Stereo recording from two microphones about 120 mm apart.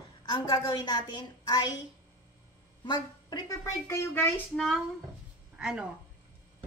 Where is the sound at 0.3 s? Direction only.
40° left (ahead or behind).